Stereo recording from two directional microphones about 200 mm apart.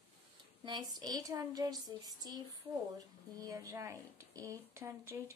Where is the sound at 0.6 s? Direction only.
20° right (ahead or behind).